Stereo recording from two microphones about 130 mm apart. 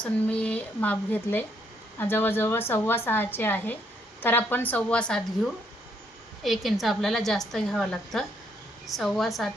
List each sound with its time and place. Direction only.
0.0 s a woman's voice: 10° left (ahead or behind)